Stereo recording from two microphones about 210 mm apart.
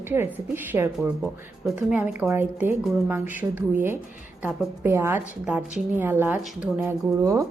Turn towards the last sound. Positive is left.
turn(degrees=-15)  # may be behind; listen again after turning